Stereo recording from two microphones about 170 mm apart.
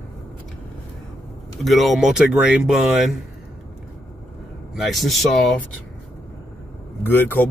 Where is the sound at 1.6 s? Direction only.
Centre (ahead or behind).